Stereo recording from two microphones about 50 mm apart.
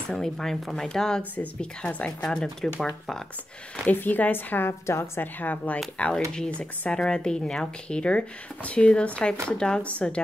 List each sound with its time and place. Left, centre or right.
0.1 s speech: centre
1.6 s speech: left
2.2 s speech: centre
3.8 s speech: left
4.6 s a woman's voice: left
5.2 s speech: left
5.9 s speech: left